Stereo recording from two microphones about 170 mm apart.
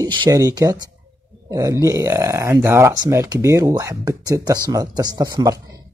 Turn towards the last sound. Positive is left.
turn(degrees=-20)  # may be behind; listen again after turning